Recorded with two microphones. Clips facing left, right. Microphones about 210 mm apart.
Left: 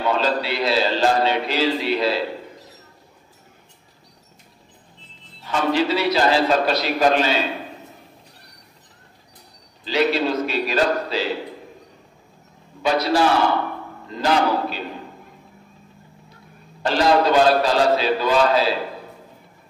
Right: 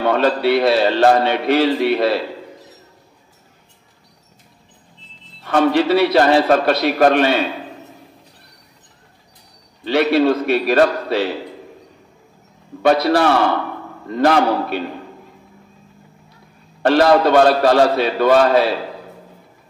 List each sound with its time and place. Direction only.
0.0 s a man's voice: 60° right (ahead or behind)
5.4 s a man's voice: 60° right (ahead or behind)
9.8 s a man's voice: 60° right (ahead or behind)
12.8 s a man's voice: 60° right (ahead or behind)
16.8 s a man's voice: 60° right (ahead or behind)